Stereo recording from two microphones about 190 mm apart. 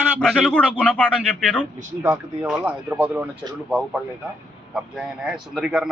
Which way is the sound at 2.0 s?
10° right (ahead or behind).